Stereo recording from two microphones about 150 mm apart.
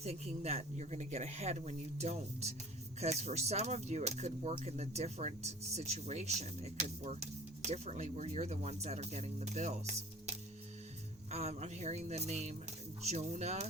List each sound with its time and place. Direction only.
0.0 s speech: 45° right (ahead or behind)